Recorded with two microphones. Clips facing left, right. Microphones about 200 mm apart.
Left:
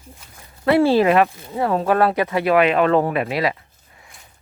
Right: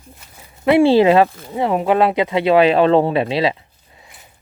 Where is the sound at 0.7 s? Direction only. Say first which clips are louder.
Right 3 dB; 25° right (ahead or behind).